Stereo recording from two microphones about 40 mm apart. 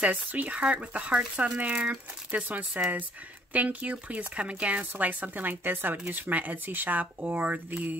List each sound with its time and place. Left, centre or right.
0.0 s speech: right